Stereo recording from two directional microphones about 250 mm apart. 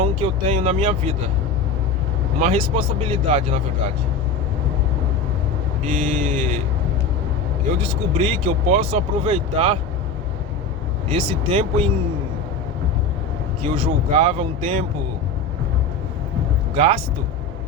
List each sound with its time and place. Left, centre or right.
0.0 s speech: right
2.4 s speech: right
6.1 s speech: right
7.8 s speech: right
11.1 s speech: right
13.6 s speech: right
16.7 s speech: right